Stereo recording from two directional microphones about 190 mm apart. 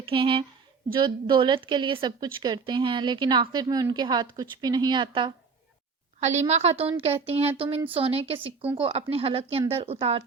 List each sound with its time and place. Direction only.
0.0 s a woman's voice: 25° right (ahead or behind)
6.1 s a woman's voice: 35° right (ahead or behind)